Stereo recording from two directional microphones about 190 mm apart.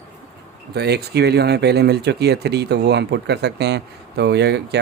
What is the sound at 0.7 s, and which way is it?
Speech, 60° right (ahead or behind).